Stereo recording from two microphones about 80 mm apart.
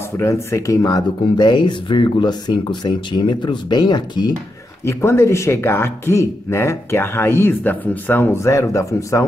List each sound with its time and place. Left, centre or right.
0.2 s speech: left
4.8 s speech: left